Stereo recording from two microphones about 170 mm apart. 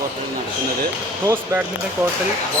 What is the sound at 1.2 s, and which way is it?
Speech, 15° right (ahead or behind).